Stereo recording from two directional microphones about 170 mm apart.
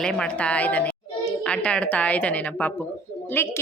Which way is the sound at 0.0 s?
5° left (ahead or behind).